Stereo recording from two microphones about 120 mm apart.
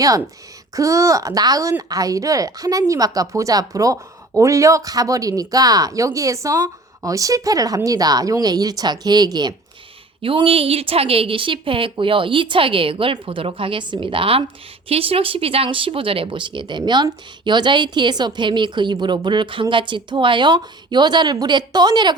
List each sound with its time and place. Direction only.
0.8 s a woman's voice: 25° right (ahead or behind)
10.2 s a woman's voice: 50° right (ahead or behind)